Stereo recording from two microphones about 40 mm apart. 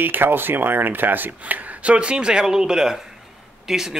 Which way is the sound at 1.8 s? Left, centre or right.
Right.